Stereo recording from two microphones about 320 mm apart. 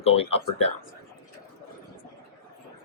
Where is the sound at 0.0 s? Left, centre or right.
Centre.